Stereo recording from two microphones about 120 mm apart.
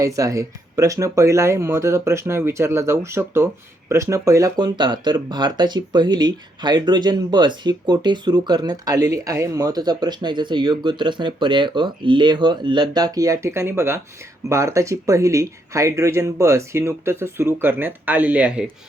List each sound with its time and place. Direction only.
0.0 s speech: 25° right (ahead or behind); by 18.7 s 10° right (ahead or behind)